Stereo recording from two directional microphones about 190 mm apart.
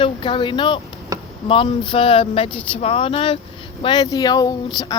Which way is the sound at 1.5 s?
25° left (ahead or behind).